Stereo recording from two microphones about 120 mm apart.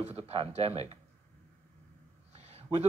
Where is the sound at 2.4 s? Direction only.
65° right (ahead or behind).